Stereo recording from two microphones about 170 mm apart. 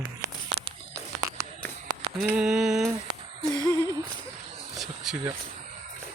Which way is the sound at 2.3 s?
5° right (ahead or behind).